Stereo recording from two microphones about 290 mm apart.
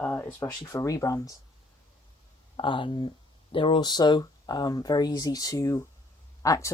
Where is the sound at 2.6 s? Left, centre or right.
Centre.